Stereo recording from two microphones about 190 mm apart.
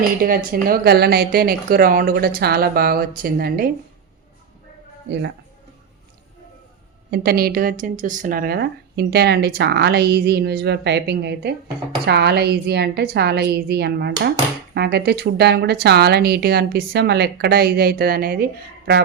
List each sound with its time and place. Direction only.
0.2 s a woman's voice: 50° right (ahead or behind)
5.0 s speech: 65° right (ahead or behind)
7.1 s speech: 55° right (ahead or behind)